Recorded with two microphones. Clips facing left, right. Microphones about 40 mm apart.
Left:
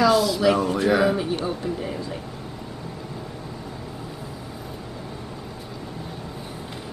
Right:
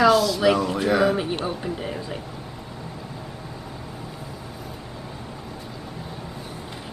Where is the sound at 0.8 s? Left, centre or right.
Centre.